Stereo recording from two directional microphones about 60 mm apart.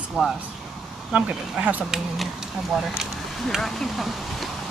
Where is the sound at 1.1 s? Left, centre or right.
Centre.